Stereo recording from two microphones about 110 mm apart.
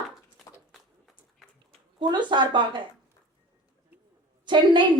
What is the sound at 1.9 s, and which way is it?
Speech, 45° right (ahead or behind).